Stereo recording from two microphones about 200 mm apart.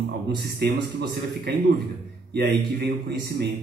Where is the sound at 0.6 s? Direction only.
55° right (ahead or behind).